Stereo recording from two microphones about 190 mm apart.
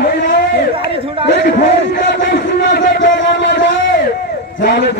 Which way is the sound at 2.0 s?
65° left (ahead or behind).